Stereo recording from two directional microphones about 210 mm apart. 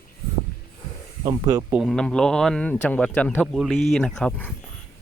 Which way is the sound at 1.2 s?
20° right (ahead or behind).